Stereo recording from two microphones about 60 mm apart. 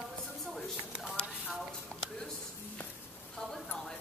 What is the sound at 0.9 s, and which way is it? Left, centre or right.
Speech, centre.